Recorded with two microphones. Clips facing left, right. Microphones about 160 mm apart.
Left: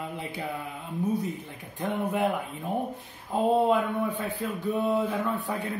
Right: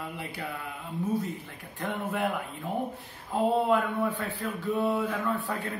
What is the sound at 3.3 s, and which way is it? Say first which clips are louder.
Speech: left 2 dB; 20° left (ahead or behind).